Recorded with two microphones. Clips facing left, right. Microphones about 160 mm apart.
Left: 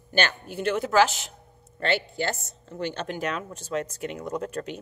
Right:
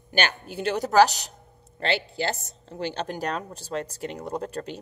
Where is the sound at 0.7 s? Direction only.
40° right (ahead or behind).